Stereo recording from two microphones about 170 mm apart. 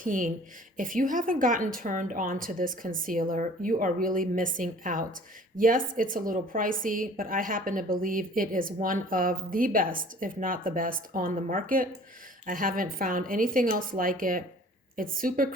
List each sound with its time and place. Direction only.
0.0 s a woman's voice: 50° right (ahead or behind)